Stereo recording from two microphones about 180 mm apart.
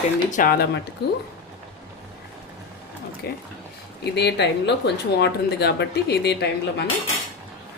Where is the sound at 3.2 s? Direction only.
60° left (ahead or behind).